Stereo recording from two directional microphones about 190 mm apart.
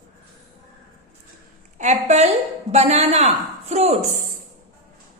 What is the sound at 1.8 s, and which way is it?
A woman's voice, 35° right (ahead or behind).